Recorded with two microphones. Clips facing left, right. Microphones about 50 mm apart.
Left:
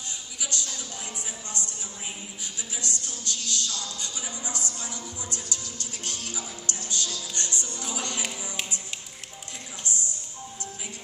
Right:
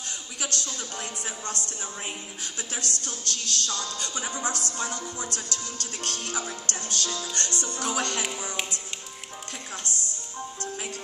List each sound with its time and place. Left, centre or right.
0.4 s music: right
2.4 s speech: right